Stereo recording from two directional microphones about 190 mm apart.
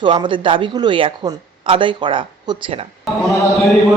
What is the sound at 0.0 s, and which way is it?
A woman's voice, 25° right (ahead or behind).